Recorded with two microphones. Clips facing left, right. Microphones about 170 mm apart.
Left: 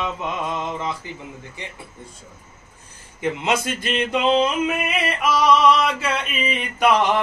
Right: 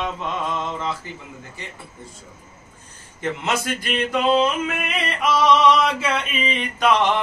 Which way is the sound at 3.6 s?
20° left (ahead or behind).